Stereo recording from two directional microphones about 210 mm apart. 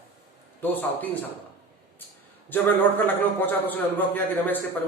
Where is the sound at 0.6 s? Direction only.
10° left (ahead or behind).